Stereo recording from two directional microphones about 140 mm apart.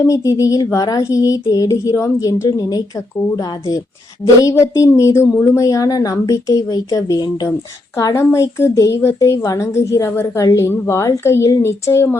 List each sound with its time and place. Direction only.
0.1 s a woman's voice: 25° left (ahead or behind)